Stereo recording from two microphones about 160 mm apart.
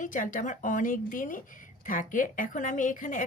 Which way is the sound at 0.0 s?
55° left (ahead or behind).